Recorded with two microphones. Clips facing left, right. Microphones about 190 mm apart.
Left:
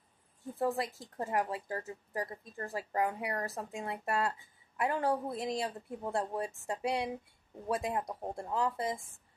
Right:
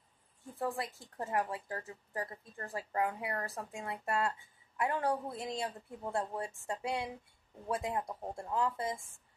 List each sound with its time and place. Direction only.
0.6 s speech: 20° left (ahead or behind)